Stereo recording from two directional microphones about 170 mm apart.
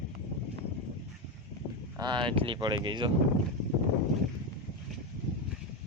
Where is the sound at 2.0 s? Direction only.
25° right (ahead or behind).